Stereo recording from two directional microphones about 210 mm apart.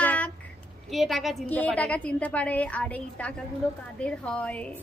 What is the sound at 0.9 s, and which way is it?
A woman's voice, centre (ahead or behind).